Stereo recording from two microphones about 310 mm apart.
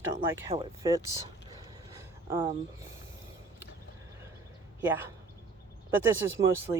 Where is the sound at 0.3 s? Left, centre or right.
Centre.